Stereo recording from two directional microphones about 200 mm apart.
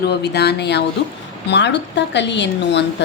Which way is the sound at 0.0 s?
55° left (ahead or behind).